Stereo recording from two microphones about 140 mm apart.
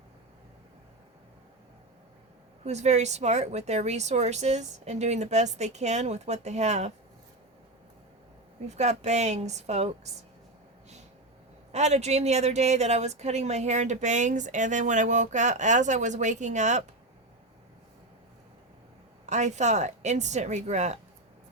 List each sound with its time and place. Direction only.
2.6 s speech: 55° right (ahead or behind)
8.6 s speech: 55° right (ahead or behind)
11.7 s a woman's voice: 55° right (ahead or behind)
19.2 s a woman's voice: 55° right (ahead or behind)